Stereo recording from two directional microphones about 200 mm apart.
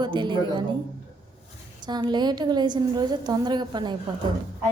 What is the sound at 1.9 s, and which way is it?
A woman's voice, 20° right (ahead or behind).